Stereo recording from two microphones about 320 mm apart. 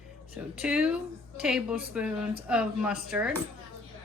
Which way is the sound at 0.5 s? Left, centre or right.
Centre.